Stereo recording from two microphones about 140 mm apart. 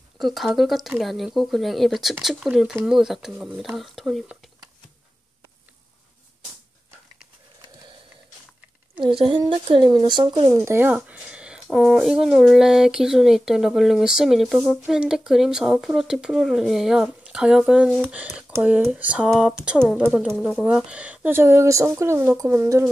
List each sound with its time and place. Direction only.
0.2 s speech: centre (ahead or behind)
9.0 s a woman's voice: 35° right (ahead or behind); by 20.6 s 5° left (ahead or behind)
20.6 s speech: 10° right (ahead or behind)